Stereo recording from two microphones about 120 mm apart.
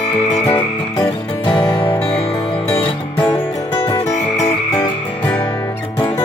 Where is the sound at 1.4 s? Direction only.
45° left (ahead or behind).